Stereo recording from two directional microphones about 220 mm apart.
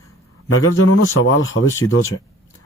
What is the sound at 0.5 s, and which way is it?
A man's voice, 70° left (ahead or behind).